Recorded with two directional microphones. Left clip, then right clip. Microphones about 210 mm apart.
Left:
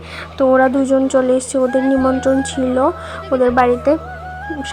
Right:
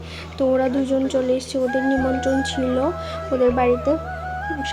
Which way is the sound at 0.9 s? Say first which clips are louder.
Left 6 dB; 20° left (ahead or behind).